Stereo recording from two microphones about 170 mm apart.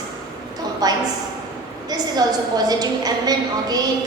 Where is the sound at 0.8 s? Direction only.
20° right (ahead or behind).